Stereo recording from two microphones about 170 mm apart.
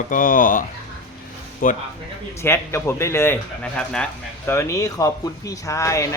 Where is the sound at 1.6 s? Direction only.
55° left (ahead or behind).